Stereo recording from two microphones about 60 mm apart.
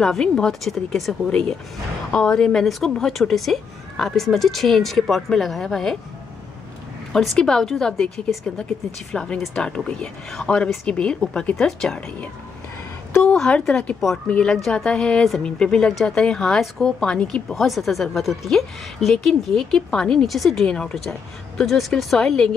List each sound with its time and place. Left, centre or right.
0.0 s speech: centre
2.1 s speech: centre
7.1 s speech: centre
9.1 s speech: centre
13.2 s a woman's voice: centre
14.5 s speech: centre
15.9 s speech: centre
16.2 s speech: centre